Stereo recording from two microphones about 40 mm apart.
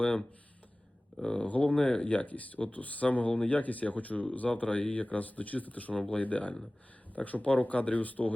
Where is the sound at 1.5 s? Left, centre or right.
Left.